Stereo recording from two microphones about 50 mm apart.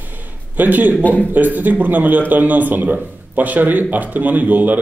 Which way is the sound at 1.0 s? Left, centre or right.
Left.